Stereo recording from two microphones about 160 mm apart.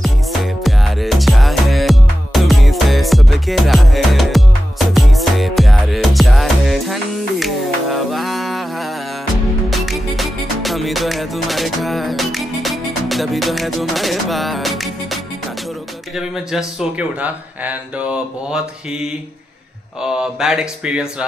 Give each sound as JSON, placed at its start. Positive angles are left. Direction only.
{"t": 0.0, "sound": "music", "side_deg": 0}
{"t": 9.7, "sound": "music", "side_deg": 0}
{"t": 17.2, "sound": "mantra", "side_deg": -10}
{"t": 20.0, "sound": "speech", "side_deg": -5}